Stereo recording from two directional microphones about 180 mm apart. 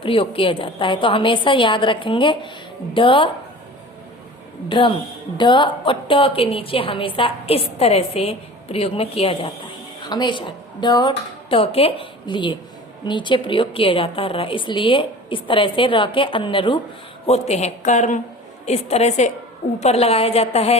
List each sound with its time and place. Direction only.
0.0 s a woman's voice: 30° left (ahead or behind)
4.7 s a woman's voice: 25° left (ahead or behind)